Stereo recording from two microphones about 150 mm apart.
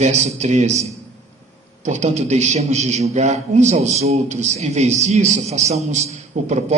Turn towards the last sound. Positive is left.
turn(degrees=-45)  # may be behind; listen again after turning